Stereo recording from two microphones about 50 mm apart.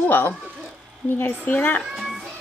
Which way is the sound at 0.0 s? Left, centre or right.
Left.